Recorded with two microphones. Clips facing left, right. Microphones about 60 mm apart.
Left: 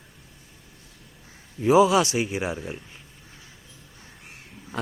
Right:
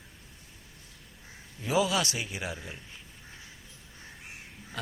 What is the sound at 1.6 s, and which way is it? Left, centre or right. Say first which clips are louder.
Speech: left 10 dB; left.